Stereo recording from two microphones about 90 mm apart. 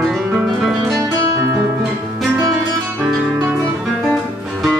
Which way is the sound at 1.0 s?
35° right (ahead or behind).